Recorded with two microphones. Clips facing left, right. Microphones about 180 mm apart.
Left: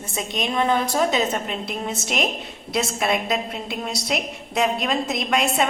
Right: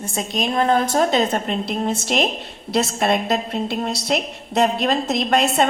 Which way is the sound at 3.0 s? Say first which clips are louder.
Right 3 dB; 50° right (ahead or behind).